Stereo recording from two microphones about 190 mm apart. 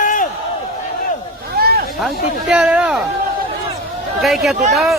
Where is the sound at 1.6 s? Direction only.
55° right (ahead or behind).